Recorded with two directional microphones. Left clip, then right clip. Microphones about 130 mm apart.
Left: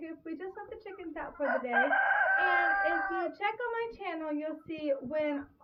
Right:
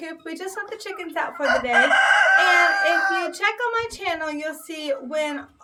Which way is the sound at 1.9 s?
5° left (ahead or behind).